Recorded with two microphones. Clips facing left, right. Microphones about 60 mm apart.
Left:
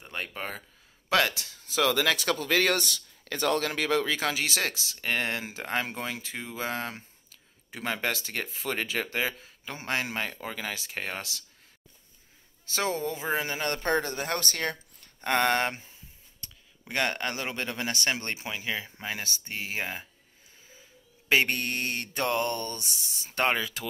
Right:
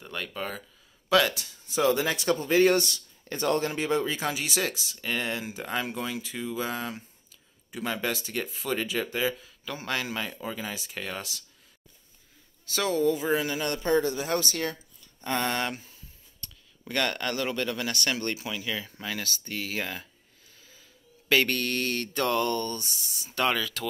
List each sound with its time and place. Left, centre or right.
0.0 s speech: left
1.8 s speech: left
2.2 s speech: left
9.4 s speech: left
12.7 s speech: left
15.7 s speech: left
21.3 s speech: left
22.8 s speech: right
23.1 s speech: left